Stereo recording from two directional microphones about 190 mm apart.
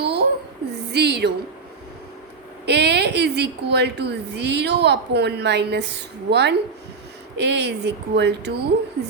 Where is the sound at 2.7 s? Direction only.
60° right (ahead or behind).